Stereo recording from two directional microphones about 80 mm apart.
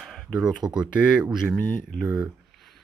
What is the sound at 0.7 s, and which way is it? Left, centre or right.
Speech, centre.